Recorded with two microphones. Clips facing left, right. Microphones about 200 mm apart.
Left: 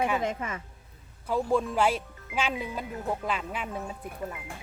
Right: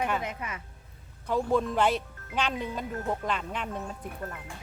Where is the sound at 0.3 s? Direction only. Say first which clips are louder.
Left 5 dB; 30° left (ahead or behind).